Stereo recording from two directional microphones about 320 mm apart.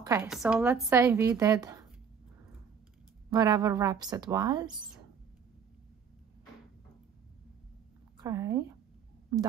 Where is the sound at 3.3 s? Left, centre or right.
Centre.